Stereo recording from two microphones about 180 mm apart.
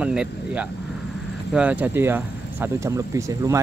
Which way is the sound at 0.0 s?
5° right (ahead or behind).